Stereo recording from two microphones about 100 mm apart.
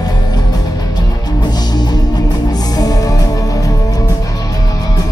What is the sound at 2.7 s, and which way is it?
Music, 40° left (ahead or behind).